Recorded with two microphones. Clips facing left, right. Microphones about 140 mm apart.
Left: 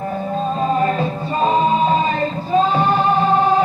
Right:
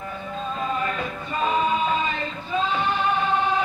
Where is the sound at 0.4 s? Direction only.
35° left (ahead or behind).